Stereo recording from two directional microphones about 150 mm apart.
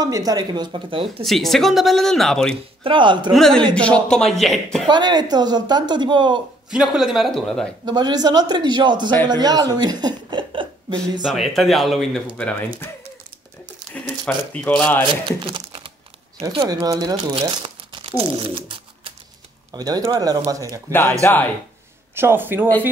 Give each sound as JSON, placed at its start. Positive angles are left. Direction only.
{"t": 0.0, "sound": "speech", "side_deg": -25}
{"t": 1.2, "sound": "speech", "side_deg": 0}
{"t": 2.8, "sound": "a man's voice", "side_deg": -35}
{"t": 3.3, "sound": "speech", "side_deg": 5}
{"t": 4.8, "sound": "speech", "side_deg": -30}
{"t": 6.7, "sound": "speech", "side_deg": -5}
{"t": 7.8, "sound": "a woman's voice", "side_deg": -25}
{"t": 11.2, "sound": "speech", "side_deg": 0}
{"t": 13.9, "sound": "a sound", "side_deg": 10}
{"t": 15.2, "sound": "speech", "side_deg": -35}
{"t": 19.7, "sound": "speech", "side_deg": -25}
{"t": 21.2, "sound": "speech", "side_deg": 15}
{"t": 22.1, "sound": "speech", "side_deg": -15}